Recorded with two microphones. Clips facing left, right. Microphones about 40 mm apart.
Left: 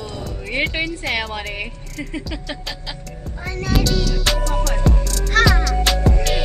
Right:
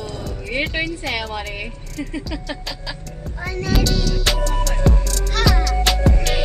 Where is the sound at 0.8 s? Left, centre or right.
Centre.